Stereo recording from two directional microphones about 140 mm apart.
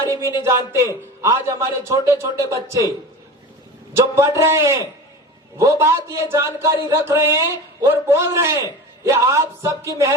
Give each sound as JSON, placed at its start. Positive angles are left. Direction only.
{"t": 0.4, "sound": "speech", "side_deg": -20}
{"t": 3.9, "sound": "speech", "side_deg": -20}